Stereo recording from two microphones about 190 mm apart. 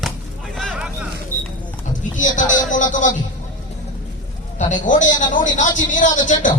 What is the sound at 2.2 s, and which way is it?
Speech, 45° left (ahead or behind).